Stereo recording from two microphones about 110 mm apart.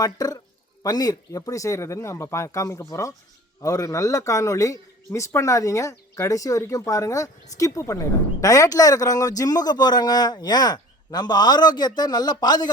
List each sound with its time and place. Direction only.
0.0 s a man's voice: 35° left (ahead or behind)